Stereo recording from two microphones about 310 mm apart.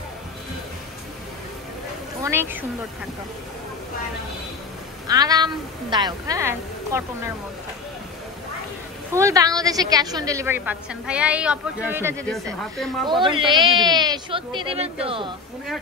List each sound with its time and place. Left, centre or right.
2.2 s a woman's voice: centre
5.0 s a woman's voice: centre
9.1 s a woman's voice: centre
13.3 s a woman's voice: centre